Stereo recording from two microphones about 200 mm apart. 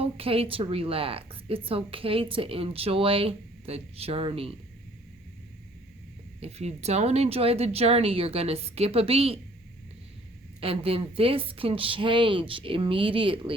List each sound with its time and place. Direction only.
0.0 s a woman's voice: 30° right (ahead or behind)
6.4 s a woman's voice: 30° right (ahead or behind)
10.6 s a woman's voice: 30° right (ahead or behind)